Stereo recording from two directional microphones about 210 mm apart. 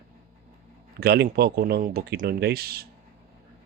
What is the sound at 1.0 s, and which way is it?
A man's voice, 50° right (ahead or behind).